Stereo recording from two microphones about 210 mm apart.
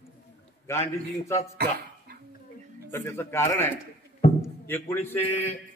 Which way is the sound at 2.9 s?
10° left (ahead or behind).